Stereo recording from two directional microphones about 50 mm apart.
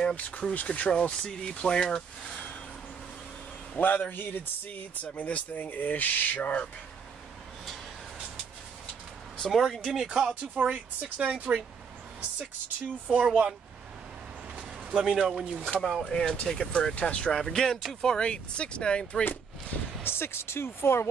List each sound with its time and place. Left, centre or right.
0.1 s speech: left; by 2.3 s centre
3.8 s speech: left
9.5 s speech: centre
9.9 s speech: centre
10.5 s a woman's voice: right
14.5 s a sound: right
15.0 s speech: centre
16.1 s speech: centre
16.7 s speech: left
17.3 s speech: centre
19.2 s speech: left